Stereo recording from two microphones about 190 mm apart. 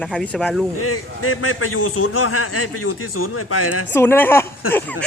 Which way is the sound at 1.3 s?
90° left.